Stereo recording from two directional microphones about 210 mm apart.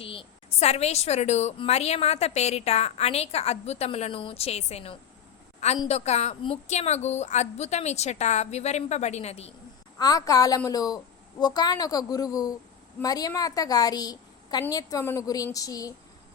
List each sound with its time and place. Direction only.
0.0 s a woman's voice: 25° left (ahead or behind)
10.0 s a woman's voice: 15° left (ahead or behind)